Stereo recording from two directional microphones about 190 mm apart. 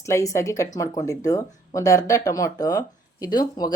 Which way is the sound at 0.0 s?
15° left (ahead or behind).